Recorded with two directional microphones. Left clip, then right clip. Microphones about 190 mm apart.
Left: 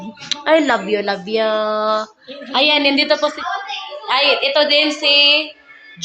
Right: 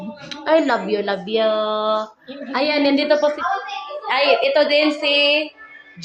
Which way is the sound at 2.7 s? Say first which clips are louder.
Left 1 dB; 10° left (ahead or behind).